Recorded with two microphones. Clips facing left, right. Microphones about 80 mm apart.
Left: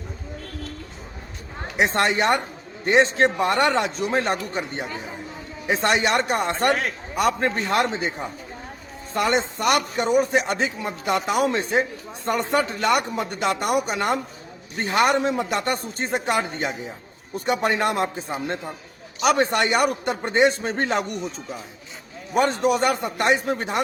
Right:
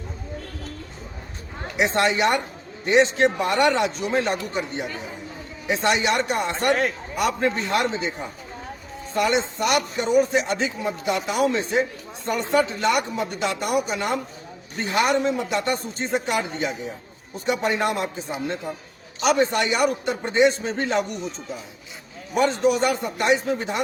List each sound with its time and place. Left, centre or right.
1.7 s speech: left
6.7 s speech: centre
7.2 s speech: left
9.1 s speech: left
19.2 s speech: left
22.4 s speech: left